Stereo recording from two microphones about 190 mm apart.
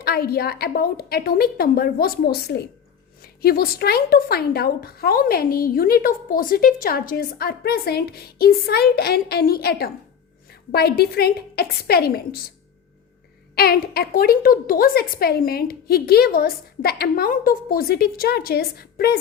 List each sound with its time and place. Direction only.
0.0 s a woman's voice: 55° left (ahead or behind)
13.6 s speech: 55° left (ahead or behind)